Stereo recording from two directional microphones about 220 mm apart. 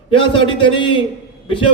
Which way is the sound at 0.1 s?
25° left (ahead or behind).